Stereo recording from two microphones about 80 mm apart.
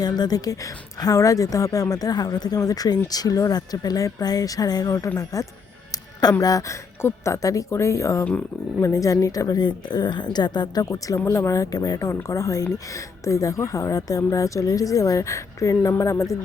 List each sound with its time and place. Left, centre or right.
0.0 s a woman's voice: left
5.9 s music: left
6.4 s a woman's voice: left
8.2 s speech: centre
8.8 s a woman's voice: left